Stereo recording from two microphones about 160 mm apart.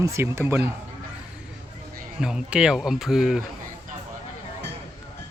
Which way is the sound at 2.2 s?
5° right (ahead or behind).